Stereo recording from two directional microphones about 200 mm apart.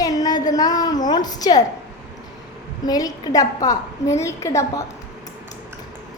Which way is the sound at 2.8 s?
20° left (ahead or behind).